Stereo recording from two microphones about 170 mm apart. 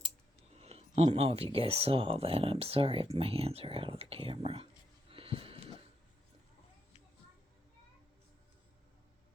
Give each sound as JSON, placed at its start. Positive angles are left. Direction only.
{"t": 0.5, "sound": "speech", "side_deg": -40}